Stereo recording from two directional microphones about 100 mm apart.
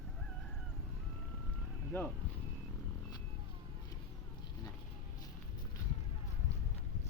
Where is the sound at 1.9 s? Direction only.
25° left (ahead or behind).